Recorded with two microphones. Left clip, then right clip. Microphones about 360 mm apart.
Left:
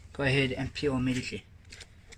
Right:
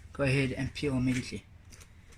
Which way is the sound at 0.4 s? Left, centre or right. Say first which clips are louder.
Left 3 dB; left.